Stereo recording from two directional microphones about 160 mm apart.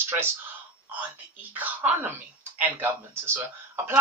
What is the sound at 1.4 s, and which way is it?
Speech, 10° right (ahead or behind).